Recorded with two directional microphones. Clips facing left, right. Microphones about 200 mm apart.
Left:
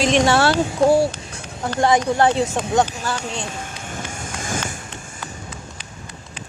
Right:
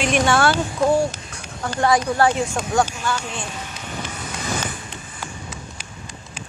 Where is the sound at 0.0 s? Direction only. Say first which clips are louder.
Left 2 dB; 30° left (ahead or behind).